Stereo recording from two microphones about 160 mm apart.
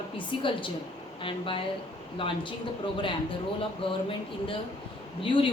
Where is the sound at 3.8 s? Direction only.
35° left (ahead or behind).